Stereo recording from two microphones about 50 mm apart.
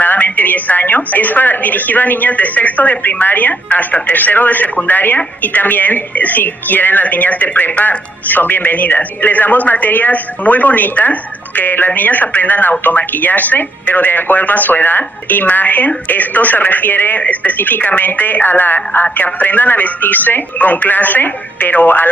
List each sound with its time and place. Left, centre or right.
0.0 s a woman's voice: left